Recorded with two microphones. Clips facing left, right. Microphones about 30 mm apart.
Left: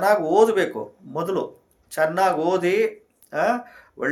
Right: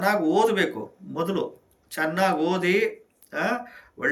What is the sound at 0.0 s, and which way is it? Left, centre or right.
Speech, right.